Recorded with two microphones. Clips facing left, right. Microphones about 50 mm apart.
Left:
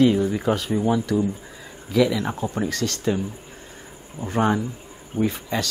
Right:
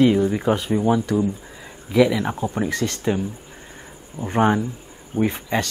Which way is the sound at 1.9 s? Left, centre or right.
Centre.